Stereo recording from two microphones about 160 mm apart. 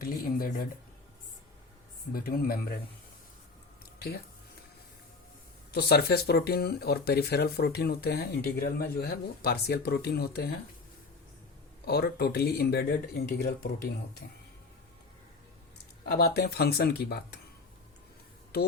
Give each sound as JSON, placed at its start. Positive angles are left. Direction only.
{"t": 0.0, "sound": "speech", "side_deg": 65}
{"t": 2.1, "sound": "speech", "side_deg": 65}
{"t": 5.7, "sound": "speech", "side_deg": 80}
{"t": 11.9, "sound": "speech", "side_deg": 85}
{"t": 16.1, "sound": "speech", "side_deg": 80}